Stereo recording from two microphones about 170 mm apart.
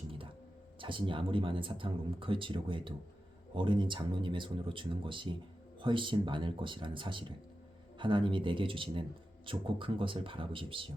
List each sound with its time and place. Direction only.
0.8 s speech: 30° right (ahead or behind)